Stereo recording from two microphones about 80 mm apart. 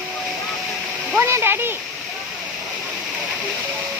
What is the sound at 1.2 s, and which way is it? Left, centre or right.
Speech, right.